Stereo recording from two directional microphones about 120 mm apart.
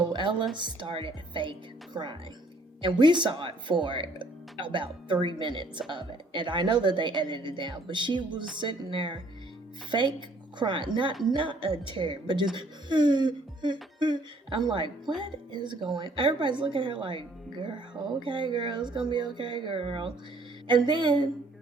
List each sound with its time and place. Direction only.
0.1 s music: 40° right (ahead or behind)
0.5 s a woman's voice: 40° right (ahead or behind)